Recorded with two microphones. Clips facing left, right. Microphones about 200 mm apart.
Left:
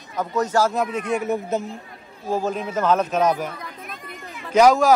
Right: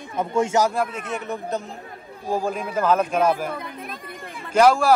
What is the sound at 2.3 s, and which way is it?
A man's voice, 10° right (ahead or behind).